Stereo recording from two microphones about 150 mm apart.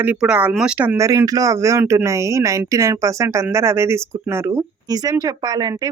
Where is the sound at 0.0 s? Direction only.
10° right (ahead or behind).